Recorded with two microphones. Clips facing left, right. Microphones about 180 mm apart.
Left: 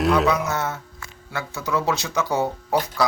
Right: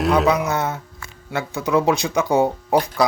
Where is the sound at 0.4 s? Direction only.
15° right (ahead or behind).